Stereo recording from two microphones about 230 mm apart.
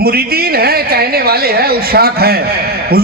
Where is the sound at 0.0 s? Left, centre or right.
Right.